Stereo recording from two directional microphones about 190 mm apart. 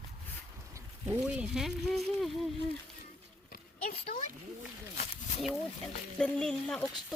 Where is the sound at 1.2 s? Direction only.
Centre (ahead or behind).